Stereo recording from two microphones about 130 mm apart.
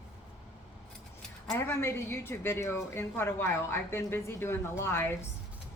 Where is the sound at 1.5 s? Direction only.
20° left (ahead or behind).